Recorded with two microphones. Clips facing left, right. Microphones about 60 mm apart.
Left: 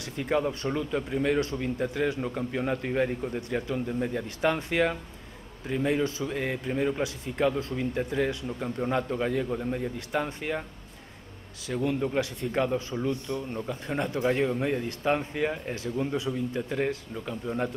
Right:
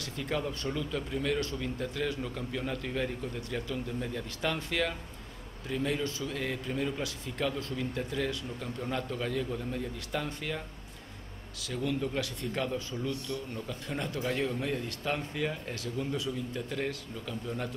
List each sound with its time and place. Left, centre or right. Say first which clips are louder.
0.0 s speech: left 6 dB; left
11.6 s speech: left 5 dB; left